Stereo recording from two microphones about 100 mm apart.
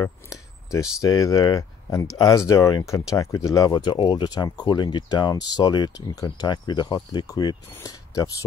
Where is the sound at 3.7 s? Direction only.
50° left (ahead or behind).